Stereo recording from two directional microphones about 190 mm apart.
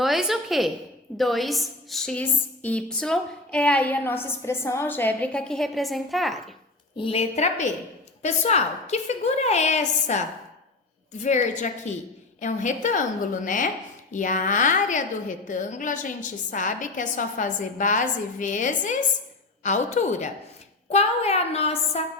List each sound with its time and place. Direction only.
0.0 s a woman's voice: centre (ahead or behind)
6.9 s a woman's voice: 30° left (ahead or behind)